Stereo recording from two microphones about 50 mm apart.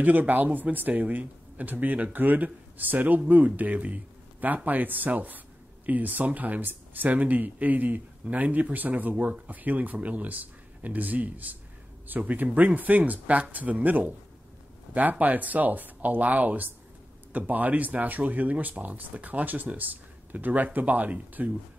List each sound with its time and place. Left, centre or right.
0.0 s speech: right